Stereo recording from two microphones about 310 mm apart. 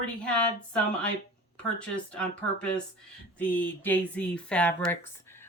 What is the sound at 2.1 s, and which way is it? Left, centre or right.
Speech, centre.